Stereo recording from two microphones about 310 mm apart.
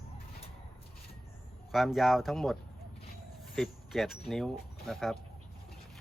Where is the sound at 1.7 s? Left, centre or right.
Centre.